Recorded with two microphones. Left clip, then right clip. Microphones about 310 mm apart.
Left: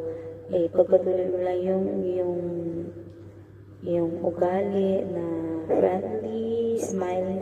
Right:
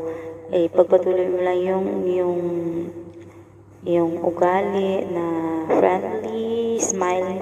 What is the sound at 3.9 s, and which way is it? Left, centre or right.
Speech, right.